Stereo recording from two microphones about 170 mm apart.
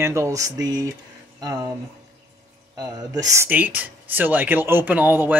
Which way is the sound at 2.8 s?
20° right (ahead or behind).